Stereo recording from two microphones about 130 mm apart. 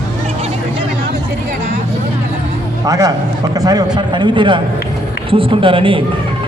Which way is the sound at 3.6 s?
30° right (ahead or behind).